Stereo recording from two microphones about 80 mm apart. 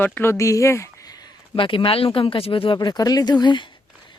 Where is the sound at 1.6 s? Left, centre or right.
Left.